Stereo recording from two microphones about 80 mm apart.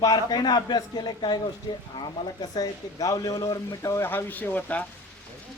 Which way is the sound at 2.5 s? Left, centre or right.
Left.